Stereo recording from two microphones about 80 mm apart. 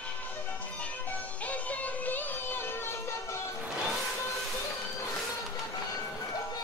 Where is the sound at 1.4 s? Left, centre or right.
Centre; by 3.4 s left.